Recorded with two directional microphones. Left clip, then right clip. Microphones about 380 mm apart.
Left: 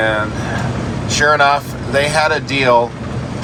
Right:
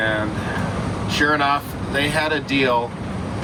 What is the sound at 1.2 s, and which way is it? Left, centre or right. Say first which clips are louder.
Speech: left 7 dB; centre.